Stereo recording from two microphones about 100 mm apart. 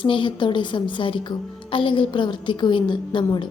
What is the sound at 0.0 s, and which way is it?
A woman's voice, 55° left (ahead or behind).